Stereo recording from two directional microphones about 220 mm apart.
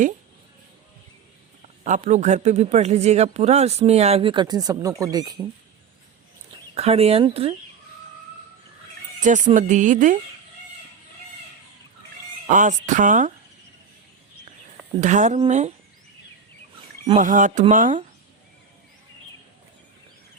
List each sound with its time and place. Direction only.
1.8 s a man's voice: 30° right (ahead or behind); by 5.5 s 15° right (ahead or behind)
6.7 s a man's voice: 30° right (ahead or behind)
9.2 s speech: 35° right (ahead or behind)
12.5 s speech: 35° right (ahead or behind)
15.0 s speech: 35° right (ahead or behind)
17.2 s speech: 35° right (ahead or behind)